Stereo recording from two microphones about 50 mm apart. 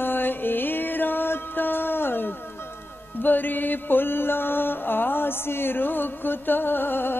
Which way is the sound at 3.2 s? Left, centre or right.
Left.